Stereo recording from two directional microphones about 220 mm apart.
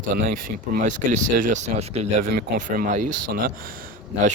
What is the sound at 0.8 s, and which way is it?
Speech, 35° right (ahead or behind).